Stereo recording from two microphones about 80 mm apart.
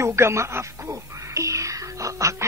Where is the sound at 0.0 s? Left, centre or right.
Right.